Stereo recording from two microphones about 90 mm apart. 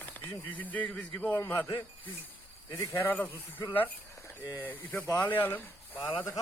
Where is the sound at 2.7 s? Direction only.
25° left (ahead or behind).